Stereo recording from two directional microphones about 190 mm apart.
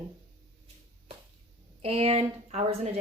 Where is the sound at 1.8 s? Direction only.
30° right (ahead or behind).